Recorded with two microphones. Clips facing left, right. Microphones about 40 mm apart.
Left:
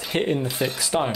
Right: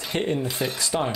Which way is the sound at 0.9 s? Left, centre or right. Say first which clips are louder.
Left 2 dB; centre.